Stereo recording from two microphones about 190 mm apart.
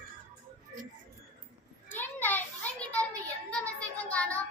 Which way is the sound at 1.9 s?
10° left (ahead or behind).